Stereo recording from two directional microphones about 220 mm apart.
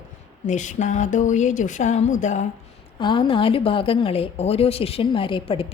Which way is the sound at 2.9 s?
20° left (ahead or behind).